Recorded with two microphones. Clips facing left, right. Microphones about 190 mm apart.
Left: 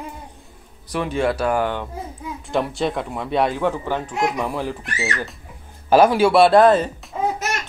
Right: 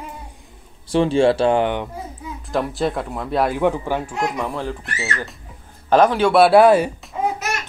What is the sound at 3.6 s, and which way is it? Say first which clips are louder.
Speech: right 2 dB; 15° right (ahead or behind).